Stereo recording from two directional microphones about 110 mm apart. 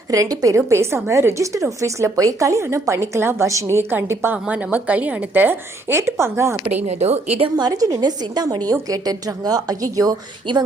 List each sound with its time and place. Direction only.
0.1 s a woman's voice: 30° right (ahead or behind)
6.8 s a woman's voice: 90° right; by 7.5 s 70° right (ahead or behind)
7.5 s a woman's voice: 35° right (ahead or behind)
10.5 s speech: 45° right (ahead or behind)